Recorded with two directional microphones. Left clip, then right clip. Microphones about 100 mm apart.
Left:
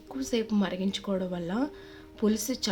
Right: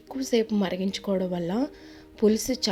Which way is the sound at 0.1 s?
25° right (ahead or behind).